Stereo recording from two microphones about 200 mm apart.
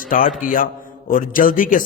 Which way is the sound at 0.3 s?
40° left (ahead or behind).